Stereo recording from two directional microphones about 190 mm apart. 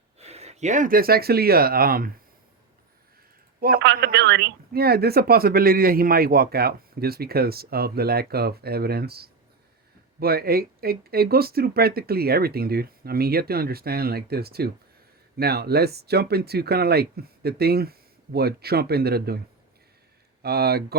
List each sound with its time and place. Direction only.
0.2 s speech: 35° right (ahead or behind); by 2.0 s 50° right (ahead or behind)
3.6 s a man's voice: 50° right (ahead or behind)
20.4 s a man's voice: 55° right (ahead or behind)